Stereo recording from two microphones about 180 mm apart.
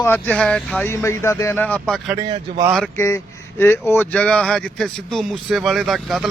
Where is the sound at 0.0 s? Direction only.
10° left (ahead or behind).